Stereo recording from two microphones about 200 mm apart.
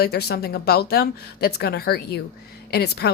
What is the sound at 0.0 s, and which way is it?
Speech, 50° left (ahead or behind).